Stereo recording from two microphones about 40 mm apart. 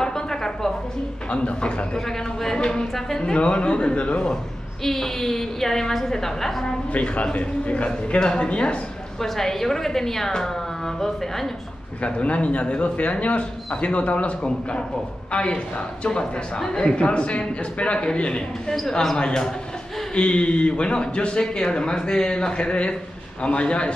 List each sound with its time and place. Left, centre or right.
0.0 s music: centre
1.3 s a woman's voice: left
2.0 s a woman's voice: centre
2.6 s a woman's voice: left
4.8 s a woman's voice: centre
6.9 s a man's voice: left
9.2 s a woman's voice: centre
12.0 s a man's voice: left
18.9 s a woman's voice: centre; by 23.9 s left